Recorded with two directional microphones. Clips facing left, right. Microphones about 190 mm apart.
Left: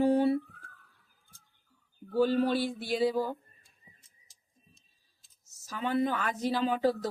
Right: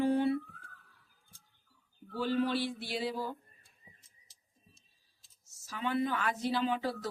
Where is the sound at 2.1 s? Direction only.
40° left (ahead or behind).